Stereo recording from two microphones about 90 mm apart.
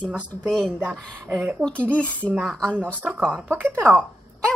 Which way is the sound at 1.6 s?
15° left (ahead or behind).